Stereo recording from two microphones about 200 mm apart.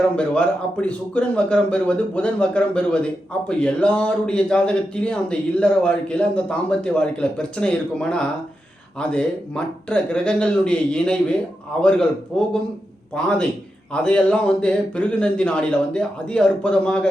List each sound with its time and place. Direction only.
0.2 s speech: 5° left (ahead or behind)